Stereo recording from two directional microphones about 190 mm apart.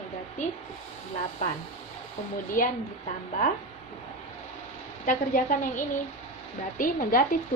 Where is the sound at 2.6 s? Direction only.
45° left (ahead or behind).